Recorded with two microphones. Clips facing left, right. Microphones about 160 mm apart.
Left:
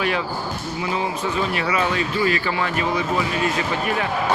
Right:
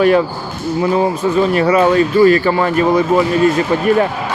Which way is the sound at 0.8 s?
45° right (ahead or behind).